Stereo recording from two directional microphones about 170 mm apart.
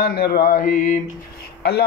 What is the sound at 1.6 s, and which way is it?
Speech, 75° left (ahead or behind).